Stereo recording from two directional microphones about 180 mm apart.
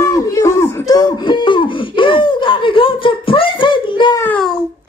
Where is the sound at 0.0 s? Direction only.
15° left (ahead or behind).